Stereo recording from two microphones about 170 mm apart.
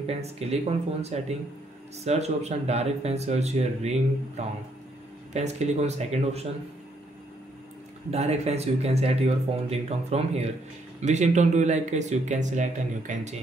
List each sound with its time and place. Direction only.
0.0 s speech: 40° right (ahead or behind)
5.3 s speech: 40° right (ahead or behind)
8.1 s speech: 40° right (ahead or behind)